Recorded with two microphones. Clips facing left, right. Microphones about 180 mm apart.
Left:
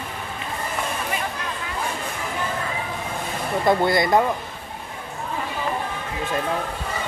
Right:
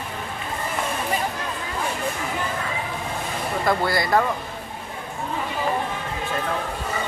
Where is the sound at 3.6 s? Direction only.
20° left (ahead or behind).